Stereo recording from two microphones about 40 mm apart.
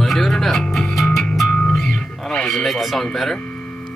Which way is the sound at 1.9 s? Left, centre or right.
Left.